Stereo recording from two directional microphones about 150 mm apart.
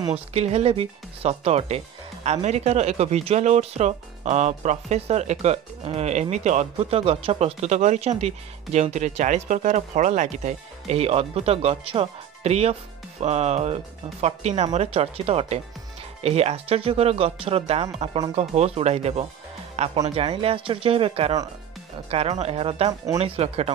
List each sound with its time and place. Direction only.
0.1 s speech: 45° right (ahead or behind)